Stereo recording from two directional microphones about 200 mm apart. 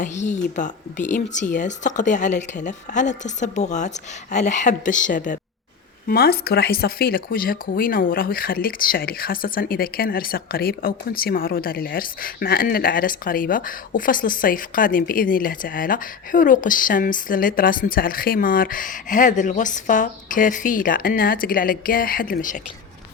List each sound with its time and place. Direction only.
0.0 s a woman's voice: 35° left (ahead or behind)